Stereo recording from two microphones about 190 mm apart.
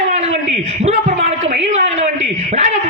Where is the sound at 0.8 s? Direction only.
35° right (ahead or behind).